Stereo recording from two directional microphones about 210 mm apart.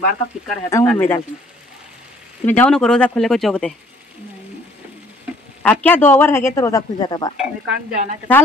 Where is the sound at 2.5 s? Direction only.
5° left (ahead or behind).